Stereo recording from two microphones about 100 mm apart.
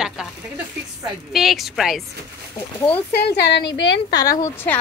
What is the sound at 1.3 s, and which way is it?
Speech, centre (ahead or behind).